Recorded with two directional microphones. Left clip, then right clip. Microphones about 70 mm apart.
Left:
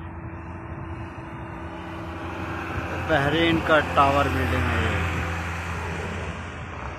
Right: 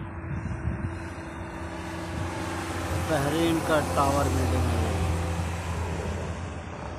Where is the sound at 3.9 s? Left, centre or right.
Left.